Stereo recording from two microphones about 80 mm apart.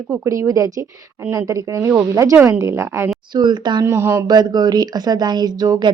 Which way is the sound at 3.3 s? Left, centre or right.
Right.